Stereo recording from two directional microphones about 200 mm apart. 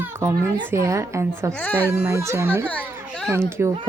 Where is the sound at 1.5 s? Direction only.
10° left (ahead or behind).